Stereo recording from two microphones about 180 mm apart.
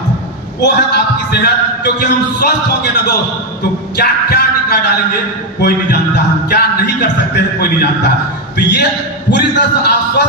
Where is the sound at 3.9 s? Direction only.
65° left (ahead or behind).